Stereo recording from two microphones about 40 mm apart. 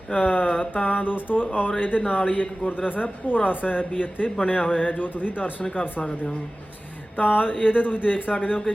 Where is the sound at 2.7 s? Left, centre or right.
Left.